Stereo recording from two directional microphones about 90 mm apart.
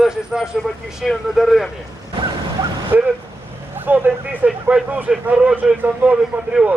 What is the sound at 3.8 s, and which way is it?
Speech, 20° right (ahead or behind).